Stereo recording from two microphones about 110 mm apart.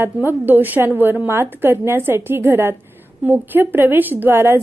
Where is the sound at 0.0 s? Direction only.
20° right (ahead or behind).